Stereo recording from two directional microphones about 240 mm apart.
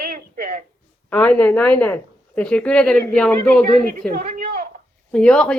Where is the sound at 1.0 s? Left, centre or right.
Centre.